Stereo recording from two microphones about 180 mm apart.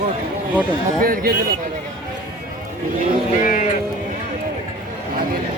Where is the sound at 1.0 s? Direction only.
55° right (ahead or behind).